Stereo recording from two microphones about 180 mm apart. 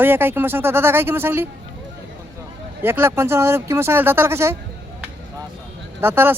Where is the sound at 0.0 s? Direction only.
10° right (ahead or behind).